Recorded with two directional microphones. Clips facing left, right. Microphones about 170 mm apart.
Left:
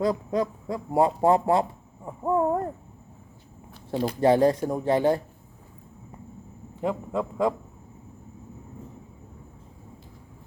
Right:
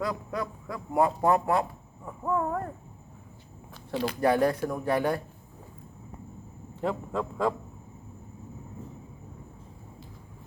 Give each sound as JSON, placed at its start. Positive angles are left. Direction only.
{"t": 0.0, "sound": "a man's voice", "side_deg": 30}
{"t": 3.9, "sound": "speech", "side_deg": -80}
{"t": 4.2, "sound": "a man's voice", "side_deg": 25}
{"t": 6.8, "sound": "speech", "side_deg": 15}